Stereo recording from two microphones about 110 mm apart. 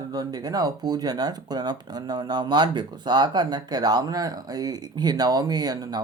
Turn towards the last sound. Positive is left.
turn(degrees=-35)  # may be behind; listen again after turning